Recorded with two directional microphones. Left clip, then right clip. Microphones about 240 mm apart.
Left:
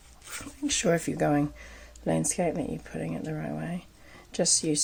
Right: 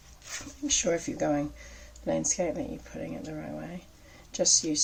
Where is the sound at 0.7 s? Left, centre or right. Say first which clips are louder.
Left 2 dB; left.